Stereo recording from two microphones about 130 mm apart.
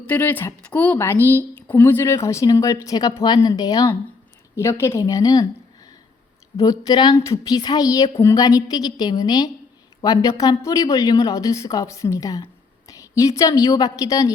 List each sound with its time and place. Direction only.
0.0 s a woman's voice: 15° left (ahead or behind); by 5.5 s 30° left (ahead or behind)
6.6 s a woman's voice: 30° left (ahead or behind)